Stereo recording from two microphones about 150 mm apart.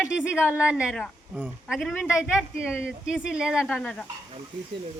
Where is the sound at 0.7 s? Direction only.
5° right (ahead or behind).